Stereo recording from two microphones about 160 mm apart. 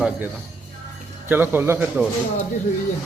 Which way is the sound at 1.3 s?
15° right (ahead or behind).